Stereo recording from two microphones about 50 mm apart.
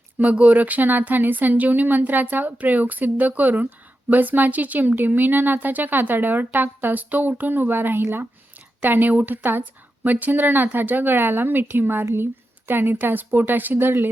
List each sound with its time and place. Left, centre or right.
0.2 s speech: right
8.8 s speech: right